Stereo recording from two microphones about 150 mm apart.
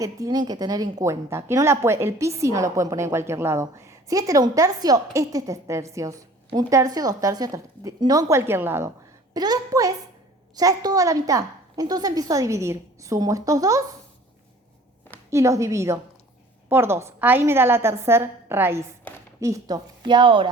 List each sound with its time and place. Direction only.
0.0 s a woman's voice: 25° right (ahead or behind)
15.3 s a woman's voice: 20° right (ahead or behind)